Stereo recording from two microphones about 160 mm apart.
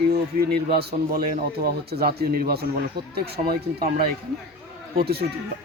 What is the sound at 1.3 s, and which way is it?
Speech, 70° right (ahead or behind).